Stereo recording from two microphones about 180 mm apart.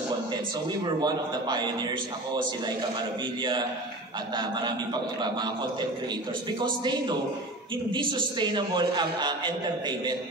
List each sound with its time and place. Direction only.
1.0 s a man's voice: 25° right (ahead or behind)
4.4 s a man's voice: 25° right (ahead or behind)